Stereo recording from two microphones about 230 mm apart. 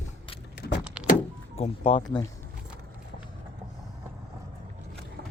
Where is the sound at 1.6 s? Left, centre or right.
Left.